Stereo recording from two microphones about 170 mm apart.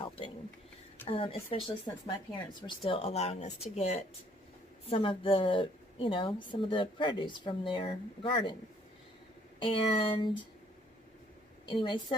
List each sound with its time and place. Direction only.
1.0 s a woman's voice: 35° left (ahead or behind)
9.6 s speech: 30° left (ahead or behind)
11.7 s a woman's voice: 30° left (ahead or behind)